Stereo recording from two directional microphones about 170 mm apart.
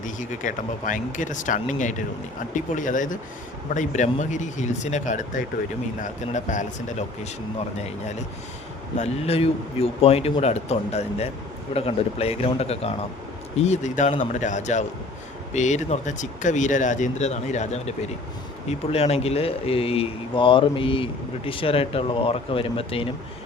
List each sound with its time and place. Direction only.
0.0 s speech: 50° left (ahead or behind)
9.0 s speech: 35° left (ahead or behind)